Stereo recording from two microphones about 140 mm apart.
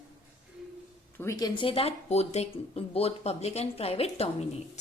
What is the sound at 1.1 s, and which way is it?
Speech, 25° left (ahead or behind).